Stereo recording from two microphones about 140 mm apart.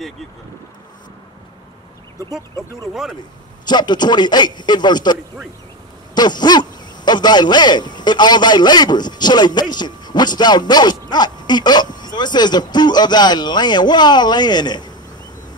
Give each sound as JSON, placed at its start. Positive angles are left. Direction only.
{"t": 2.5, "sound": "speech", "side_deg": 20}
{"t": 2.9, "sound": "speech", "side_deg": 0}
{"t": 3.6, "sound": "a man's voice", "side_deg": 30}